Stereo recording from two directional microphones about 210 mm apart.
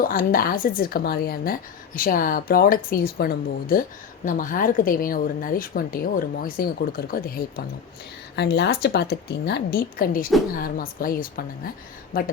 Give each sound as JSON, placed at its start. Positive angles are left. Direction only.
{"t": 0.0, "sound": "a woman's voice", "side_deg": 45}